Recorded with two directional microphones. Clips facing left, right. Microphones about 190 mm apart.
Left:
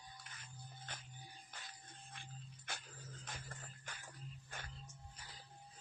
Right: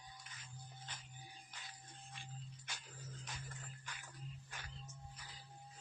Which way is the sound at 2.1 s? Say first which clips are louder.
Right 1 dB; 55° left (ahead or behind).